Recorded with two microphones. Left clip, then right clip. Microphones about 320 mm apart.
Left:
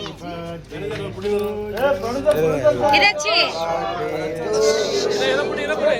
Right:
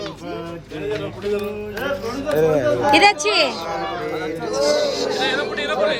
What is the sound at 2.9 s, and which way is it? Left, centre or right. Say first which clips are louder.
Speech: right 1 dB; centre.